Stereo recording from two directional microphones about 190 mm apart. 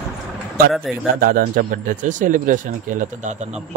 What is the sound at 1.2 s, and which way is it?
Speech, 45° right (ahead or behind).